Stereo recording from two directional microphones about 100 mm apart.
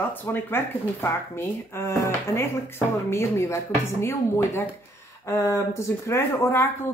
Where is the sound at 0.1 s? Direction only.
20° left (ahead or behind).